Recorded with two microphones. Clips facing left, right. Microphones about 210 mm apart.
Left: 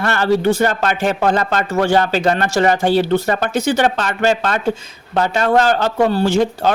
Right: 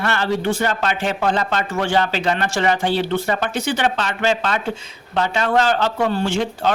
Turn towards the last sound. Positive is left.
turn(degrees=40)  # may be behind; listen again after turning